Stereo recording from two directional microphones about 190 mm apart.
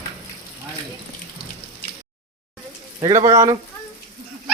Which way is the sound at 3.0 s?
20° right (ahead or behind).